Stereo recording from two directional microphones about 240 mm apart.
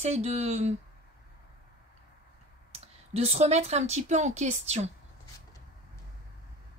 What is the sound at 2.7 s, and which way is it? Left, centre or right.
Speech, right.